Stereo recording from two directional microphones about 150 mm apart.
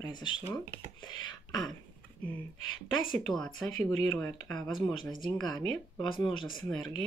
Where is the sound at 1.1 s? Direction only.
30° left (ahead or behind).